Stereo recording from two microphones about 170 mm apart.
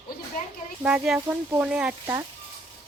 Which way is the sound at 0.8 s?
5° right (ahead or behind).